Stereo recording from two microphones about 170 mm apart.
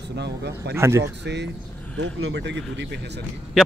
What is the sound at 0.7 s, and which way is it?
Speech, 15° right (ahead or behind).